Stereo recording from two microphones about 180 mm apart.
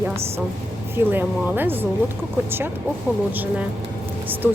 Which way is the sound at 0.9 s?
10° right (ahead or behind).